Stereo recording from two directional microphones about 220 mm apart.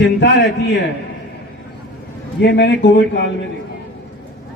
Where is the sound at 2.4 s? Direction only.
50° left (ahead or behind).